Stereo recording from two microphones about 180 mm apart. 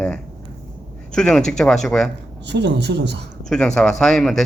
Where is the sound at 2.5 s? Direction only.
70° right (ahead or behind).